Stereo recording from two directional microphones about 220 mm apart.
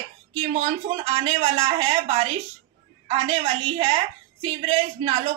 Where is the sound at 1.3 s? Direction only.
25° right (ahead or behind).